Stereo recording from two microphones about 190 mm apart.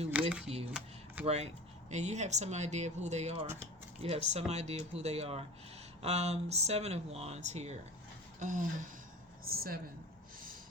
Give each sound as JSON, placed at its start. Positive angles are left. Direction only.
{"t": 0.1, "sound": "camera", "side_deg": -5}
{"t": 1.2, "sound": "speech", "side_deg": -35}